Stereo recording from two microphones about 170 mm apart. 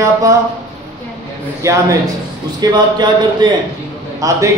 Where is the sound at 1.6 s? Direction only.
20° right (ahead or behind).